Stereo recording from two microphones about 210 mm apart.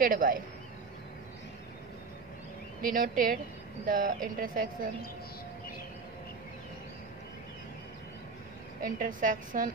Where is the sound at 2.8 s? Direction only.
40° right (ahead or behind).